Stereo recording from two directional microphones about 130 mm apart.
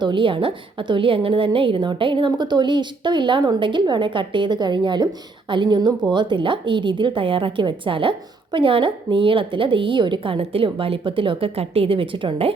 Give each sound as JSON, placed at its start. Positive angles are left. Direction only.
{"t": 0.0, "sound": "a woman's voice", "side_deg": -40}